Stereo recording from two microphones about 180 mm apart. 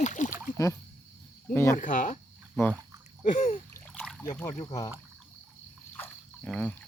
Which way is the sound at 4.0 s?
Centre (ahead or behind).